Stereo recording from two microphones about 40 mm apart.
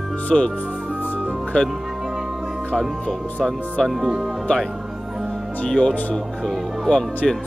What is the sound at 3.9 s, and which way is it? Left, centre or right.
Speech, centre.